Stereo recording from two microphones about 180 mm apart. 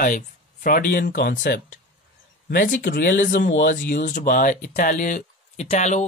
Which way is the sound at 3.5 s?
90° left.